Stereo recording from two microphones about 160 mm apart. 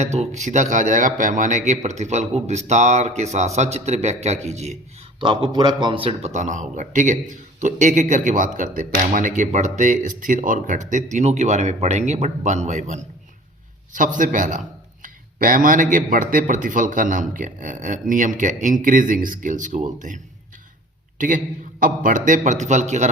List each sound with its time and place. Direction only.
0.0 s a man's voice: 45° right (ahead or behind)
5.2 s a man's voice: 30° right (ahead or behind); by 23.0 s 45° right (ahead or behind)